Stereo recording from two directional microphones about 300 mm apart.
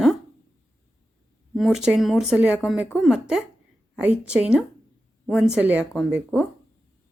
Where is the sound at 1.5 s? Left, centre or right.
Centre.